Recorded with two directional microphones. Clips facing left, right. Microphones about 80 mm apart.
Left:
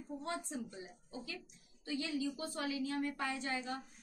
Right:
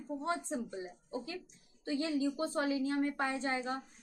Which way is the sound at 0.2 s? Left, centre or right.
Right.